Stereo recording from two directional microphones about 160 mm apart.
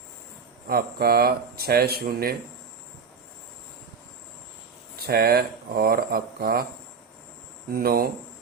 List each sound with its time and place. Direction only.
0.7 s speech: 75° right (ahead or behind)
5.0 s speech: 75° right (ahead or behind)
7.7 s speech: 70° right (ahead or behind)